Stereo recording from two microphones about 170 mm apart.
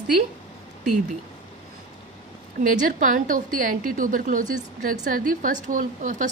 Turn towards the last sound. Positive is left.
turn(degrees=-50)  # may be behind; listen again after turning